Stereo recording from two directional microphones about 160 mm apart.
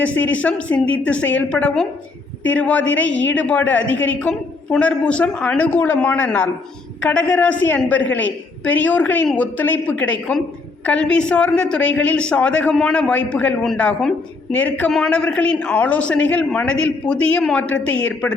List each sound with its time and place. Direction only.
0.0 s a woman's voice: 10° left (ahead or behind)